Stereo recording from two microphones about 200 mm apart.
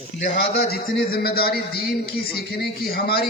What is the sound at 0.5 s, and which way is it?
A man's voice, 50° left (ahead or behind).